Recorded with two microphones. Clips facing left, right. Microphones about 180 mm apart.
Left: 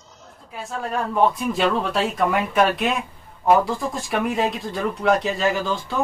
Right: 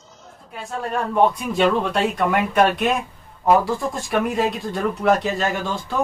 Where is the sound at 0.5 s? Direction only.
Centre (ahead or behind).